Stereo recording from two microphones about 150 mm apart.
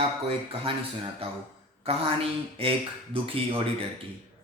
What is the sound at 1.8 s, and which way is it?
A man's voice, 40° right (ahead or behind).